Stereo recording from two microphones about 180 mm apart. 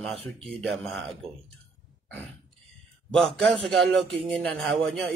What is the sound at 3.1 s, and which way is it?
A man's voice, 5° left (ahead or behind).